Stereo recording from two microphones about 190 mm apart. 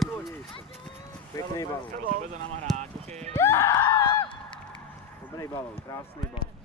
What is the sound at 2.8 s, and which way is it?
Clip-clop, 35° right (ahead or behind).